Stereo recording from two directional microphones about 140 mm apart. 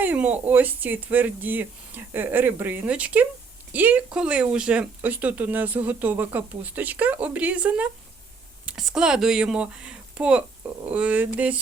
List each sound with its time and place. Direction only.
0.0 s speech: 10° right (ahead or behind)